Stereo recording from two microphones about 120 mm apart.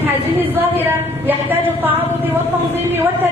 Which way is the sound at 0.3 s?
15° right (ahead or behind).